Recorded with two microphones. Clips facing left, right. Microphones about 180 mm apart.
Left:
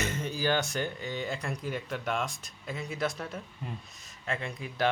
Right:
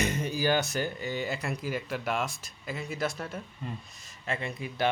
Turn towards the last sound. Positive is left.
turn(degrees=0)  # may be behind; listen again after turning